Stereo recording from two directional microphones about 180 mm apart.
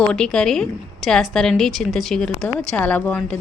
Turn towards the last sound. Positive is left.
turn(degrees=5)  # may be behind; listen again after turning